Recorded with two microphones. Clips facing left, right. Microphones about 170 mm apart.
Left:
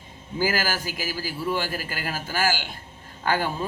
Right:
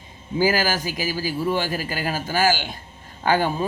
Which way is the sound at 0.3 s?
20° right (ahead or behind).